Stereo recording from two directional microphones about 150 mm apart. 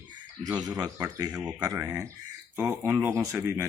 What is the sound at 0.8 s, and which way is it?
Speech, 25° right (ahead or behind).